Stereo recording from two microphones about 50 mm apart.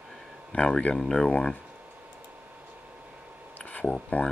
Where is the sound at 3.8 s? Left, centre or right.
Left.